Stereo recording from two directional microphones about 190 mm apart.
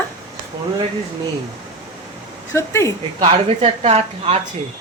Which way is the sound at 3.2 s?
30° right (ahead or behind).